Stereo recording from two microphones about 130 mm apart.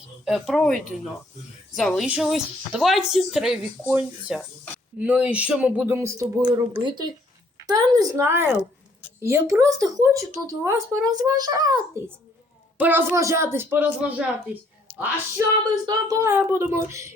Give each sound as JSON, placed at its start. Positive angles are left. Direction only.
{"t": 0.3, "sound": "speech", "side_deg": 0}
{"t": 6.0, "sound": "speech", "side_deg": -25}
{"t": 8.2, "sound": "a woman's voice", "side_deg": -15}
{"t": 9.2, "sound": "speech", "side_deg": -20}
{"t": 12.7, "sound": "speech", "side_deg": -15}
{"t": 15.4, "sound": "speech", "side_deg": -30}